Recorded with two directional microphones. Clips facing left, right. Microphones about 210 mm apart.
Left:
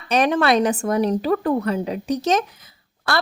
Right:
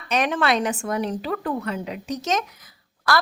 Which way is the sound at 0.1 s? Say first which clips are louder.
Left 4 dB; 35° left (ahead or behind).